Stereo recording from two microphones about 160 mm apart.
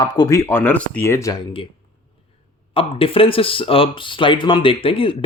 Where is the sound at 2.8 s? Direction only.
35° left (ahead or behind).